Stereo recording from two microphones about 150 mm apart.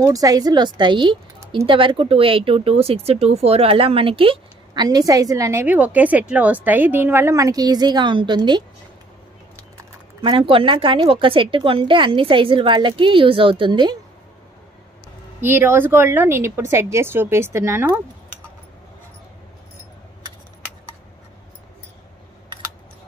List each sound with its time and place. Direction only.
0.0 s speech: 25° right (ahead or behind)
10.2 s a woman's voice: 35° right (ahead or behind)
15.4 s speech: 15° right (ahead or behind)